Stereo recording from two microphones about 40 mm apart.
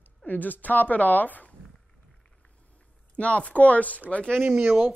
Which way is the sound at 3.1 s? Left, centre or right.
Left.